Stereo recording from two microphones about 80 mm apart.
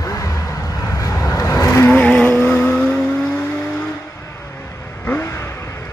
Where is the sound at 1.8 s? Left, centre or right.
Left.